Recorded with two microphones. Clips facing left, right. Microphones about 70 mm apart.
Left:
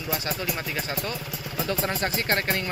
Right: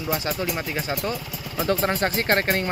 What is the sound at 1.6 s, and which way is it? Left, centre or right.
Speech, right.